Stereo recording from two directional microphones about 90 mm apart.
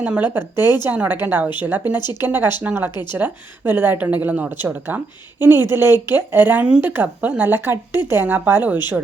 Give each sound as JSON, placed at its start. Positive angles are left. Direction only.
{"t": 0.0, "sound": "speech", "side_deg": -20}
{"t": 2.0, "sound": "speech", "side_deg": 50}
{"t": 2.2, "sound": "speech", "side_deg": -20}